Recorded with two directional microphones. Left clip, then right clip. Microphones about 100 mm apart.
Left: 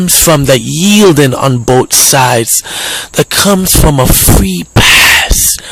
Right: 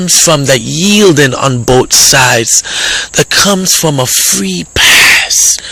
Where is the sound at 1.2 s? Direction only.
30° left (ahead or behind).